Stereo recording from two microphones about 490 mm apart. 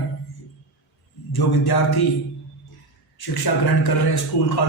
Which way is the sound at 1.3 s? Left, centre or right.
Left.